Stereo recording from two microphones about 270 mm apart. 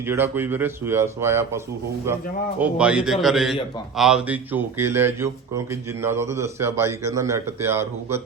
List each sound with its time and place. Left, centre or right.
0.0 s a man's voice: centre